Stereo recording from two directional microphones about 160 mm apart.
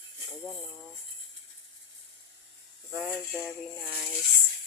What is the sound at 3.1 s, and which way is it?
Speech, centre (ahead or behind).